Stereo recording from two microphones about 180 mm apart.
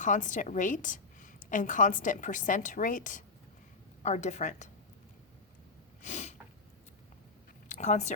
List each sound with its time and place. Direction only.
0.0 s a woman's voice: 45° left (ahead or behind)
6.0 s sneeze: 40° left (ahead or behind)
7.7 s speech: 40° left (ahead or behind)